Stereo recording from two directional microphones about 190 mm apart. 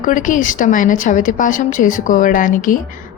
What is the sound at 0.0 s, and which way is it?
A woman's voice, 45° left (ahead or behind).